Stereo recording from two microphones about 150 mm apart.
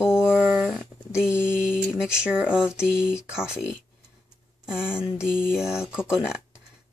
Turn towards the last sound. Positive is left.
turn(degrees=-5)  # may be behind; listen again after turning